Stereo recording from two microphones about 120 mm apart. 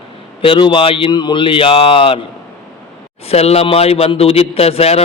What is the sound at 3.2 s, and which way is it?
Speech, 60° left (ahead or behind).